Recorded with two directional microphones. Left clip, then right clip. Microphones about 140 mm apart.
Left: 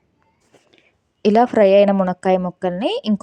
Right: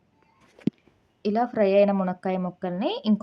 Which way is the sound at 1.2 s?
65° left (ahead or behind).